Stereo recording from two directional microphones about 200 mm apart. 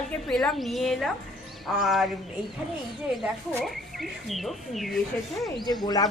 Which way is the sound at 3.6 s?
Centre (ahead or behind).